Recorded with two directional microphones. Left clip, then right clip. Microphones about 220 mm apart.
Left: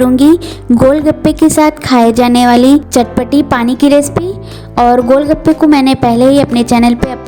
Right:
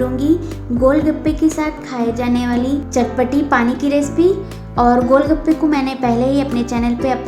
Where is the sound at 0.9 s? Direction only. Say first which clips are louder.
Left 4 dB; 45° left (ahead or behind).